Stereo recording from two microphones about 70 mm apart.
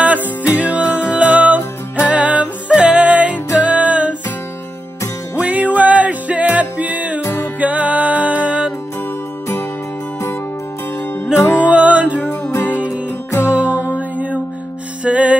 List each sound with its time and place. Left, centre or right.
0.6 s music: centre
5.4 s music: right
7.2 s music: left
7.6 s music: right
11.3 s music: left
11.7 s music: centre
12.5 s music: left
15.0 s music: centre